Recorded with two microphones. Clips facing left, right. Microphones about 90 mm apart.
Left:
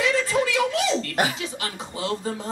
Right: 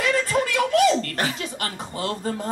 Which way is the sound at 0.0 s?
50° right (ahead or behind).